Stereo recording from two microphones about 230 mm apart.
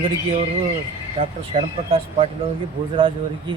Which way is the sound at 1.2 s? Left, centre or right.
Right.